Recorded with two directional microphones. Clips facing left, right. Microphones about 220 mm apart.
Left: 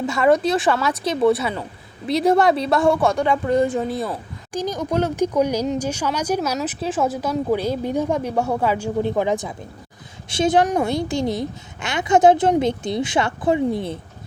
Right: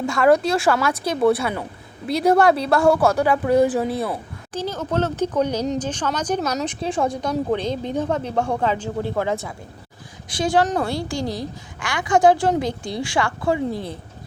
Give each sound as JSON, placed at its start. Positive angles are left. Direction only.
{"t": 0.0, "sound": "speech", "side_deg": 5}
{"t": 4.5, "sound": "a woman's voice", "side_deg": 15}